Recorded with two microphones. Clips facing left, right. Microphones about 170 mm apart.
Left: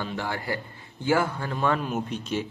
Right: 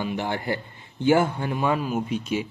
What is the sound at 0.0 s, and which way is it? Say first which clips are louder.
A man's voice: right 4 dB; 20° right (ahead or behind).